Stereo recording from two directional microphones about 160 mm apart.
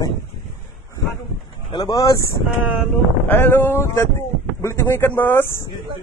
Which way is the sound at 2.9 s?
10° left (ahead or behind).